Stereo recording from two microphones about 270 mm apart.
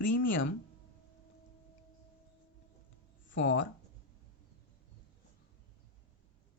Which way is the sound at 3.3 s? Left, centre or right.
Left.